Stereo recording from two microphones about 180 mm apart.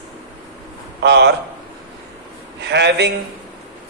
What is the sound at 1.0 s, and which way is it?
Speech, 70° right (ahead or behind).